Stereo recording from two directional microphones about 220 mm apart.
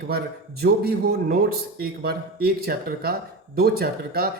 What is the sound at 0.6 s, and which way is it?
Speech, 45° right (ahead or behind).